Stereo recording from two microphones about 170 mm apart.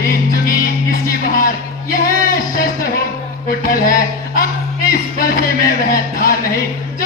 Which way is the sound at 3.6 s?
55° left (ahead or behind).